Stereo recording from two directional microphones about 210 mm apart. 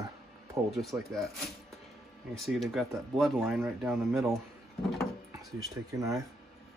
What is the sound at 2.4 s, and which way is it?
Speech, centre (ahead or behind).